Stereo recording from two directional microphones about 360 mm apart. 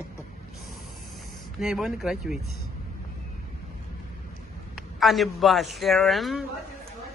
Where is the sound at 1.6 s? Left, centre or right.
Centre.